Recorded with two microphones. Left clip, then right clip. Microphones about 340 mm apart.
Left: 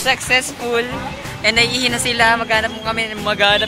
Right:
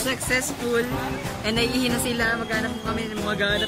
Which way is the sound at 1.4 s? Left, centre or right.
Centre.